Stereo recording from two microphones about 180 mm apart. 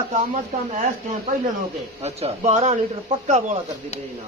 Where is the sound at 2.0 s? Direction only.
35° right (ahead or behind).